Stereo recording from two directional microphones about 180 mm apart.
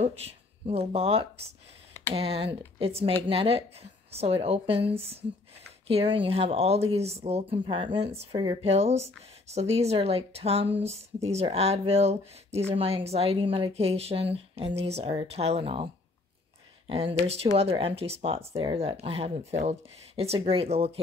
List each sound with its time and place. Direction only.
0.0 s speech: 35° right (ahead or behind)